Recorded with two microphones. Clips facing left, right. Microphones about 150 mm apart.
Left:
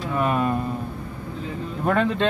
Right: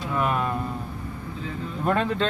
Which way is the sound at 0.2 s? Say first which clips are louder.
Left 3 dB; 20° left (ahead or behind).